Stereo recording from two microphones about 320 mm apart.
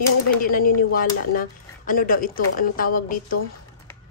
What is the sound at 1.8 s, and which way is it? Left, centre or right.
A woman's voice, left.